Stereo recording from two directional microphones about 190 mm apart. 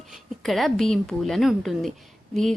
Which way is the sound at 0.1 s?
Centre (ahead or behind).